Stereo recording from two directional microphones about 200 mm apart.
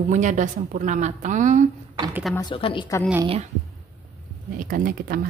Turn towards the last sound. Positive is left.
turn(degrees=-45)  # may be behind; listen again after turning